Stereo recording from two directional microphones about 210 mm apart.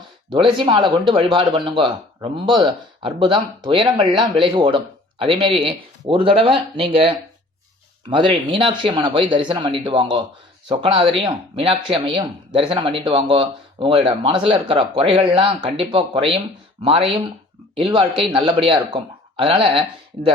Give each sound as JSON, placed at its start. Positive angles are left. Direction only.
{"t": 0.3, "sound": "speech", "side_deg": -25}